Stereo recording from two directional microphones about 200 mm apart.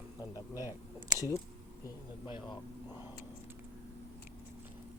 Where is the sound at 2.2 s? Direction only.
25° left (ahead or behind).